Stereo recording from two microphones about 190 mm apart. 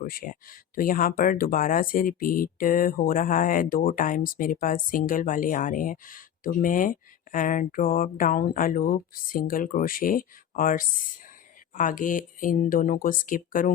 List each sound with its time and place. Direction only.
0.0 s speech: 50° left (ahead or behind)